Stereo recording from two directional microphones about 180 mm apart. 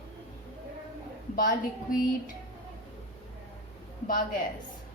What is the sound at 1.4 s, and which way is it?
Speech, 50° left (ahead or behind).